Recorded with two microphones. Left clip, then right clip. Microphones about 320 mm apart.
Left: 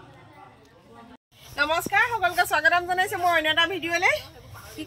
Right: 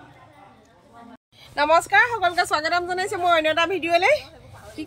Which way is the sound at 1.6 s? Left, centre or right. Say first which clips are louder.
Right 5 dB; centre.